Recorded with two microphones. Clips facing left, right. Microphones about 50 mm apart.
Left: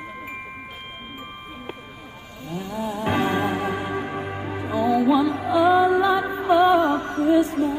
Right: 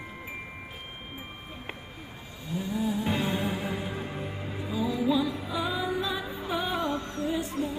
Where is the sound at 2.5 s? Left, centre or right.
Left.